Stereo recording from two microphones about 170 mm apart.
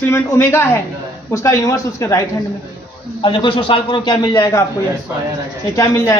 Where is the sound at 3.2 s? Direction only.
30° left (ahead or behind).